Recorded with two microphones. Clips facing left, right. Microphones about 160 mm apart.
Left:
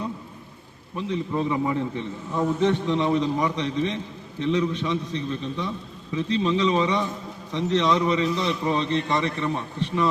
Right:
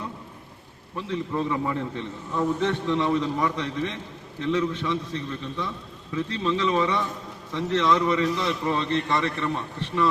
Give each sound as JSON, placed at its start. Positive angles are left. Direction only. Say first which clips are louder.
{"t": 0.9, "sound": "a man's voice", "louder": "left 2 dB", "side_deg": 15}